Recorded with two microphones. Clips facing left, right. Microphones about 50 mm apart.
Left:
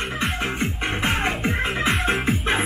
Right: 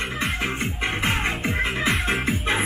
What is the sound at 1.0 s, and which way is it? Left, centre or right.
Music, centre.